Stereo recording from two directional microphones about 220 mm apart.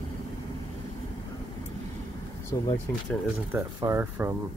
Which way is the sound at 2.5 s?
20° left (ahead or behind).